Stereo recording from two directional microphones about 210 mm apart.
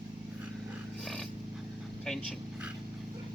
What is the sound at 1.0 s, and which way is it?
Dog, centre (ahead or behind).